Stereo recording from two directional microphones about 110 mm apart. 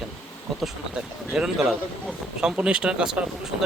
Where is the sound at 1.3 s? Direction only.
5° right (ahead or behind).